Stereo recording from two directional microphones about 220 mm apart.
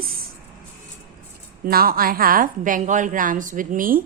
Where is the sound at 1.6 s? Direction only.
40° right (ahead or behind).